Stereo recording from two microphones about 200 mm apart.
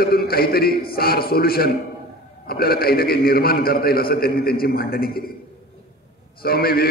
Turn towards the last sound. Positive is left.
turn(degrees=50)  # may be behind; listen again after turning